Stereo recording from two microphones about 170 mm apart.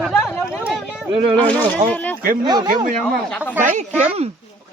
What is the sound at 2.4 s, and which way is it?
Speech, 25° right (ahead or behind).